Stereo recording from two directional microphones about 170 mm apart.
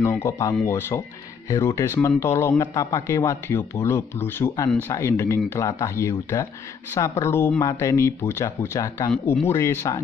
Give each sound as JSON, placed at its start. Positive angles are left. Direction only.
{"t": 0.0, "sound": "speech", "side_deg": 15}